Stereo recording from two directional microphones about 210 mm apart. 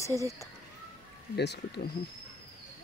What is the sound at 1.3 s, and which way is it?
Speech, 50° left (ahead or behind).